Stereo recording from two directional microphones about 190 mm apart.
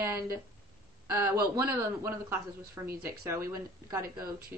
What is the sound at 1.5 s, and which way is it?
Speech, 15° right (ahead or behind).